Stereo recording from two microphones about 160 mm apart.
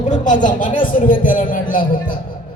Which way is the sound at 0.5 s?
55° left (ahead or behind).